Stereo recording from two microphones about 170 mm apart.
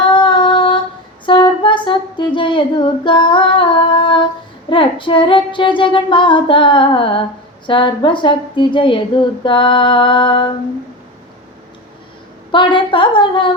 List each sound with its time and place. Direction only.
0.1 s female singing: 30° left (ahead or behind)
1.2 s humming: 30° left (ahead or behind)
4.7 s female singing: 30° left (ahead or behind)
12.5 s female singing: 30° left (ahead or behind)